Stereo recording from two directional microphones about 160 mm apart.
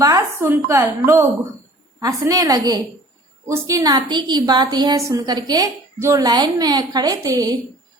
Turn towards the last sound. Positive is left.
turn(degrees=-20)  # may be behind; listen again after turning